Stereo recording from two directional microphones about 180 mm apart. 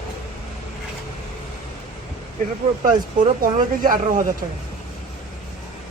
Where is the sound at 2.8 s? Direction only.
50° right (ahead or behind).